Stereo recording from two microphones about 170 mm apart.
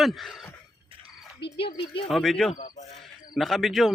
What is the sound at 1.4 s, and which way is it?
Speech, 30° left (ahead or behind).